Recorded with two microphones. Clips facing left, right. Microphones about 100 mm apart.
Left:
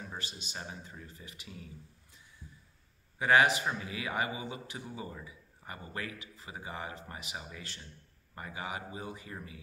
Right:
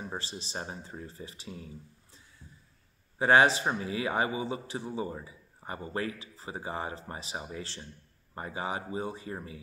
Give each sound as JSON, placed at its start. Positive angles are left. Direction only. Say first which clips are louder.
{"t": 0.0, "sound": "speech", "louder": "right 5 dB", "side_deg": -30}
{"t": 3.2, "sound": "speech", "louder": "right 3 dB", "side_deg": -30}